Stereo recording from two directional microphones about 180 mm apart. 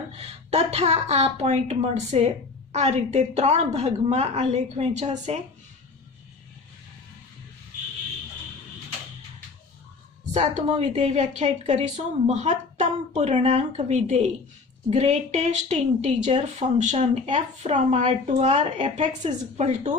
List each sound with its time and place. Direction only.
0.2 s speech: 35° right (ahead or behind)
10.3 s speech: 40° right (ahead or behind)